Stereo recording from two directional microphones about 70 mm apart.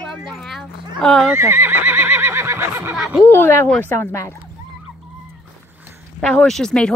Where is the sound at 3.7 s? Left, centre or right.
Left.